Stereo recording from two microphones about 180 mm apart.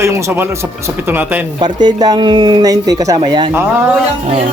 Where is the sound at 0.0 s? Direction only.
15° right (ahead or behind).